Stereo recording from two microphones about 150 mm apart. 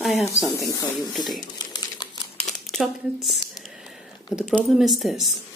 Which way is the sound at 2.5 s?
Centre (ahead or behind).